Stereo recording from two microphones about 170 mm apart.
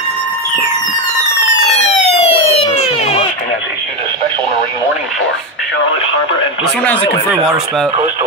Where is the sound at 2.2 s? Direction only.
35° left (ahead or behind).